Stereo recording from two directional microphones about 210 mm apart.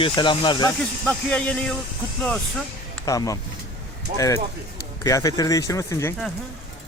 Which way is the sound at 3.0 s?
15° left (ahead or behind).